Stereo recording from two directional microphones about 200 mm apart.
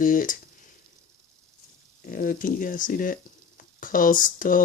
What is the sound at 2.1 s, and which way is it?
Speech, 45° left (ahead or behind).